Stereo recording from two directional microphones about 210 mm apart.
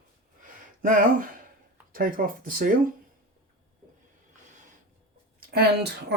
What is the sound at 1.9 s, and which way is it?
Speech, 40° right (ahead or behind).